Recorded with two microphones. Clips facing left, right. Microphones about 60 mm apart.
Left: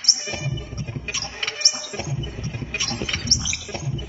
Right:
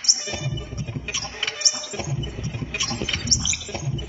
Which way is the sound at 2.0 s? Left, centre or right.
Left.